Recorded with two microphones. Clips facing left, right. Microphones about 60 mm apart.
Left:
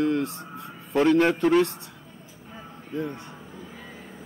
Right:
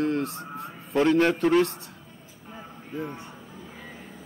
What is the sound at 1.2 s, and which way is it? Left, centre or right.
Speech, centre.